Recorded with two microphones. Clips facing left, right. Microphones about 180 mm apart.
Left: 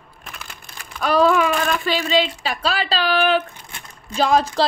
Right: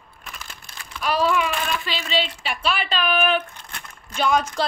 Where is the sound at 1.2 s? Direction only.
45° left (ahead or behind).